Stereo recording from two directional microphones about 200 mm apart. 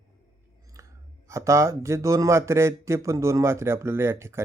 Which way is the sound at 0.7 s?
15° right (ahead or behind).